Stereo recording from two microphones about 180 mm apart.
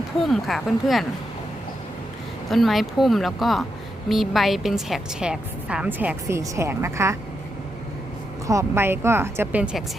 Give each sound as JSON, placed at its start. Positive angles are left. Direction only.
{"t": 0.2, "sound": "speech", "side_deg": 0}
{"t": 2.5, "sound": "a woman's voice", "side_deg": 0}
{"t": 8.4, "sound": "a woman's voice", "side_deg": -15}